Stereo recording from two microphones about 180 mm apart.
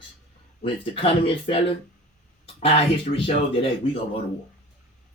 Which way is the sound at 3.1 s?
45° left (ahead or behind).